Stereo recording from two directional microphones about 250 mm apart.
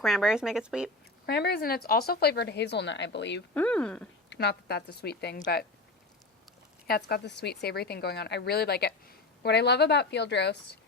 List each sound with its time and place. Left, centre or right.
0.0 s speech: centre
1.3 s a woman's voice: left
3.5 s speech: centre
4.3 s a woman's voice: left
6.8 s a woman's voice: left